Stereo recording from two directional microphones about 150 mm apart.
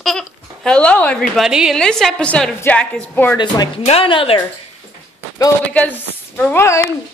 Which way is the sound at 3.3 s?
30° left (ahead or behind).